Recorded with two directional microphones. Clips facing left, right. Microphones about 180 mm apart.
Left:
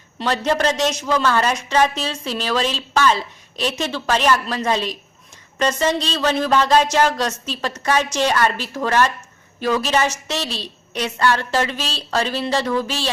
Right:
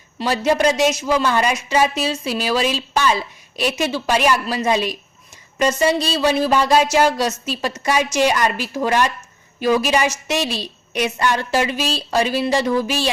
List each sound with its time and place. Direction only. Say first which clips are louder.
0.2 s speech: right 2 dB; 10° right (ahead or behind)